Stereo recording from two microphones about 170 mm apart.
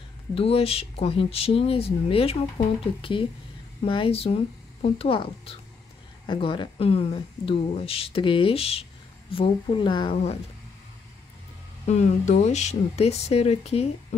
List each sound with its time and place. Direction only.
0.3 s speech: 35° left (ahead or behind)
11.9 s speech: 40° left (ahead or behind)